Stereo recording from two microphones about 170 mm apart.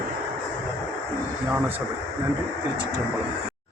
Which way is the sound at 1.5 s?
10° right (ahead or behind).